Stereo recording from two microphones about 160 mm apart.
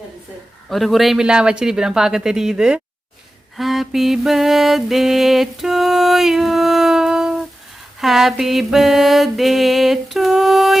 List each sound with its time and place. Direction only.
0.7 s mantra: centre (ahead or behind)